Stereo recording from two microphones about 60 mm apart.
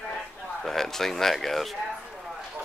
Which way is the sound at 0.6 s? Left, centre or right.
Centre.